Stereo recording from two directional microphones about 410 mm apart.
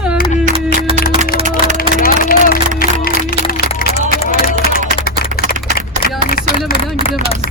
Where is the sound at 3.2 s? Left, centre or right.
Centre.